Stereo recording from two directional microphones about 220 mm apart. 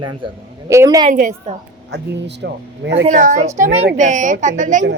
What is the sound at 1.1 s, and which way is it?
A woman's voice, 35° right (ahead or behind).